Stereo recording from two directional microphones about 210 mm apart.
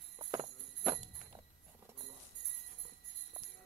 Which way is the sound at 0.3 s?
20° right (ahead or behind).